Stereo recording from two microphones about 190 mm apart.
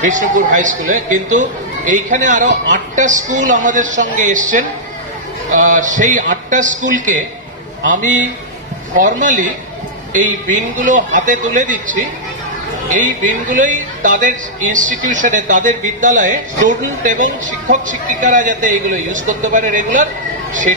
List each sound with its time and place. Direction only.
0.0 s a man's voice: 40° right (ahead or behind)
5.6 s a man's voice: 40° right (ahead or behind)